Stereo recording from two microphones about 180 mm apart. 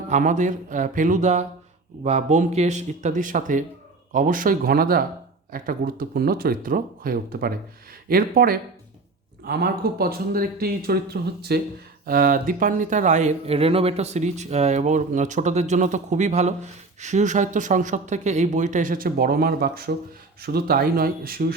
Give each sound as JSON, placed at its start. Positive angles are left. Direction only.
{"t": 0.1, "sound": "speech", "side_deg": -45}
{"t": 12.0, "sound": "speech", "side_deg": -50}